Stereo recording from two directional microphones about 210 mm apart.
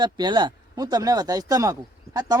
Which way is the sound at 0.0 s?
20° right (ahead or behind).